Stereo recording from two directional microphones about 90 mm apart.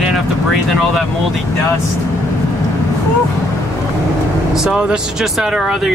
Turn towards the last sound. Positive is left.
turn(degrees=-5)  # may be behind; listen again after turning